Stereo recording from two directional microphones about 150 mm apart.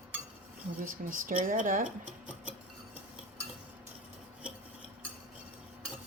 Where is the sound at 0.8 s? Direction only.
65° right (ahead or behind).